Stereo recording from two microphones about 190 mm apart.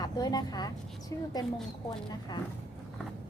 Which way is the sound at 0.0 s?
20° left (ahead or behind).